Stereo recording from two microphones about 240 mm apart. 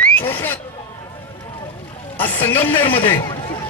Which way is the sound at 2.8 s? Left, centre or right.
Left.